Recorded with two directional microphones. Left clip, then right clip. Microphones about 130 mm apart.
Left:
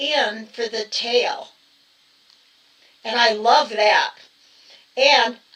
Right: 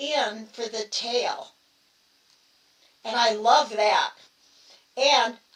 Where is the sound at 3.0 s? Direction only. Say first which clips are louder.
Left 4 dB; 25° left (ahead or behind).